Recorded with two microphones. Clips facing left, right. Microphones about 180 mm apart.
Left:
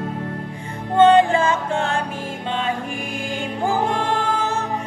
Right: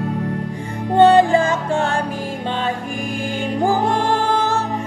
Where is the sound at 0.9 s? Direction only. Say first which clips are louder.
Right 2 dB; 35° right (ahead or behind).